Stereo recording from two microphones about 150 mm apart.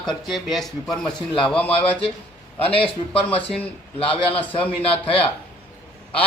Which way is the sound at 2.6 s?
40° left (ahead or behind).